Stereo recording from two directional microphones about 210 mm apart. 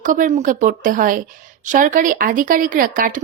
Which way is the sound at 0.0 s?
40° right (ahead or behind).